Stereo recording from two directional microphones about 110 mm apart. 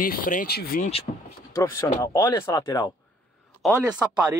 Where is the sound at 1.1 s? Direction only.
90° left.